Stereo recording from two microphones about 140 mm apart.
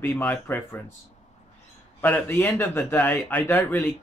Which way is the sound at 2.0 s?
15° left (ahead or behind).